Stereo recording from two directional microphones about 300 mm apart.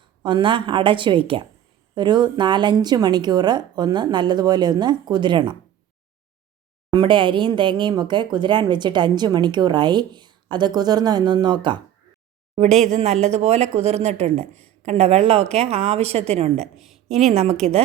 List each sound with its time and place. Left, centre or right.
0.2 s speech: centre
6.9 s a woman's voice: centre
14.4 s speech: centre
14.8 s a woman's voice: centre
16.7 s a woman's voice: centre
17.3 s a woman's voice: right